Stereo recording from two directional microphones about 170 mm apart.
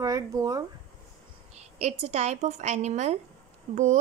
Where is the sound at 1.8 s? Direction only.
40° right (ahead or behind).